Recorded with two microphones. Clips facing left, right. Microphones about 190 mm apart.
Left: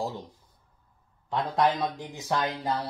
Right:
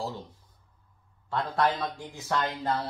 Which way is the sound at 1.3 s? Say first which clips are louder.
Left 2 dB; 15° left (ahead or behind).